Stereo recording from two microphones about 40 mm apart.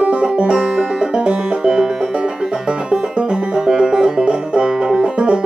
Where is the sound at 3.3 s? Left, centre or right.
Centre.